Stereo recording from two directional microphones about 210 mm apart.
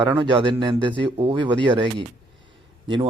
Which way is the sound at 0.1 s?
20° right (ahead or behind).